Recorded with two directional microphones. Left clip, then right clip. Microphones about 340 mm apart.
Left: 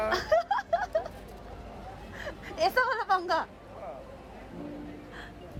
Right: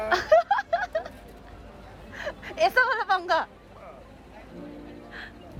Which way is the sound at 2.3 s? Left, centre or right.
Centre.